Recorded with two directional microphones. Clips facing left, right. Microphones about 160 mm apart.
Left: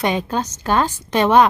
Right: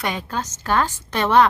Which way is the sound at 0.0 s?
20° left (ahead or behind).